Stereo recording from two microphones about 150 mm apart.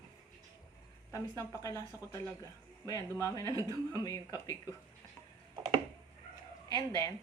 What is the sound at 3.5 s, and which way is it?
Speech, 25° right (ahead or behind).